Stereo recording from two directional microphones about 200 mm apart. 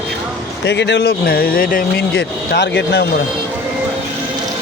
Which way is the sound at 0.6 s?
60° left (ahead or behind).